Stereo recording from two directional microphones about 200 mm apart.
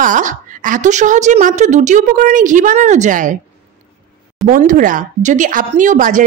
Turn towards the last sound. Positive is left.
turn(degrees=-40)  # may be behind; listen again after turning